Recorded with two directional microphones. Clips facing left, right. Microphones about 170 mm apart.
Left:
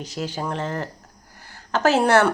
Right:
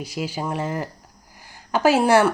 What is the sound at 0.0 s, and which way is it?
A woman's voice, 10° right (ahead or behind).